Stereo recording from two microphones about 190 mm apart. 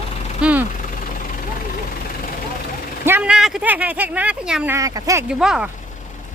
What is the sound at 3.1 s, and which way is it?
Speech, 5° right (ahead or behind).